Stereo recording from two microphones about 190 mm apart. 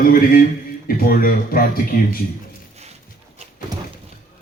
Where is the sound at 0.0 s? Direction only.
50° left (ahead or behind).